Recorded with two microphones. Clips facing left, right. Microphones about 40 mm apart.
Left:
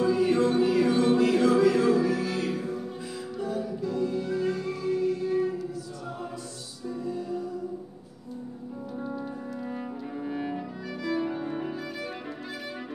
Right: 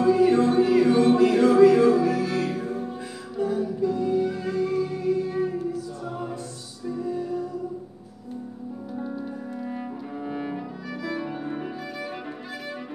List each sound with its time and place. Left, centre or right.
0.0 s music: centre
2.6 s music: right
3.3 s music: centre
7.0 s music: centre
10.1 s music: centre